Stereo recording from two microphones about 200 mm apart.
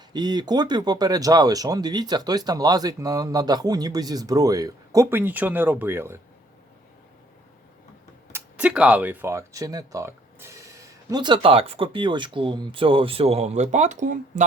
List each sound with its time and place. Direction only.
0.1 s speech: 20° right (ahead or behind)
8.3 s speech: 5° right (ahead or behind); by 14.4 s 40° right (ahead or behind)